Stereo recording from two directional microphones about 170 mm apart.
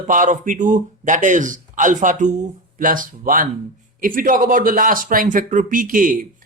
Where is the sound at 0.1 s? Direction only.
50° right (ahead or behind).